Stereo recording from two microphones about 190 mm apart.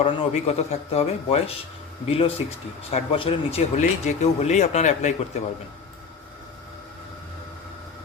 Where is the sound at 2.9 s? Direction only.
30° left (ahead or behind).